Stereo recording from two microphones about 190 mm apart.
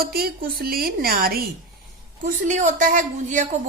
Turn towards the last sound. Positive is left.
turn(degrees=-40)  # may be behind; listen again after turning